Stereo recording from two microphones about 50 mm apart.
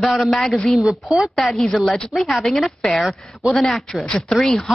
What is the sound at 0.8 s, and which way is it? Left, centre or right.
Speech, centre.